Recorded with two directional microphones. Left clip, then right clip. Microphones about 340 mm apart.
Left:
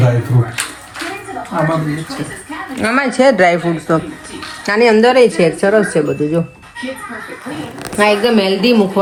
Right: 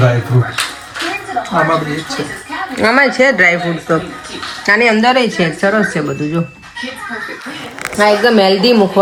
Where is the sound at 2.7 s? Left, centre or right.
Centre.